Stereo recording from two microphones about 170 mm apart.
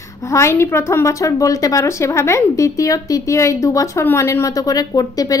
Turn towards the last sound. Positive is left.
turn(degrees=20)  # may be behind; listen again after turning